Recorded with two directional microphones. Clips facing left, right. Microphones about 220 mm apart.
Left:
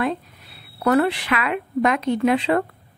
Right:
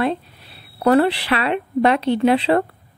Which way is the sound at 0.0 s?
30° right (ahead or behind).